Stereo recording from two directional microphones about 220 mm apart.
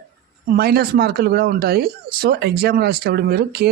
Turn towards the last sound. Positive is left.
turn(degrees=-45)  # may be behind; listen again after turning